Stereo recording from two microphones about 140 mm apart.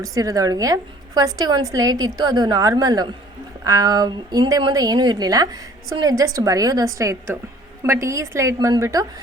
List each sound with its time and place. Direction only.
0.0 s a woman's voice: 25° right (ahead or behind)